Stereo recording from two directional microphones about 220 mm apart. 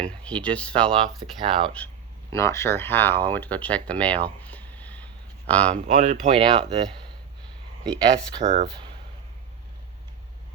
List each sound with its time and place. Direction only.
0.0 s speech: 5° left (ahead or behind)
1.4 s speech: 20° right (ahead or behind)
2.3 s speech: 15° left (ahead or behind)
5.7 s speech: 35° right (ahead or behind)
6.3 s speech: 20° right (ahead or behind)
8.4 s speech: 30° right (ahead or behind)